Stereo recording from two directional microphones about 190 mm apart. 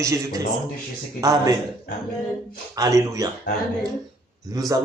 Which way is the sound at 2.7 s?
20° right (ahead or behind).